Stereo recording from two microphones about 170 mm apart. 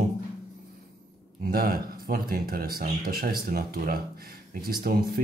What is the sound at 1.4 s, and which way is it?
Speech, 60° right (ahead or behind).